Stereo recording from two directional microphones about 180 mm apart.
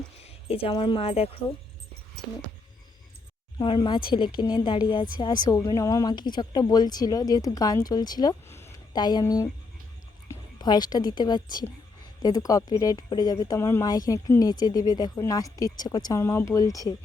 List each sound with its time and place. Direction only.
0.3 s speech: 30° left (ahead or behind)
3.6 s a woman's voice: 25° left (ahead or behind)